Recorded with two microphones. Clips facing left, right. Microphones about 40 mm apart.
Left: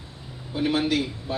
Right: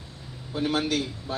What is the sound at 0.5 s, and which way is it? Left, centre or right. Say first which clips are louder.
Speech: left 3 dB; left.